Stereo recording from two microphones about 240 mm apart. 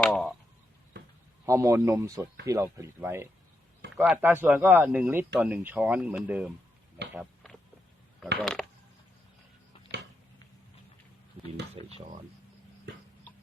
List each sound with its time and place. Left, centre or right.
0.0 s speech: centre
0.9 s a sound: right
1.5 s speech: centre
7.1 s a sound: centre
8.4 s speech: centre
11.7 s speech: right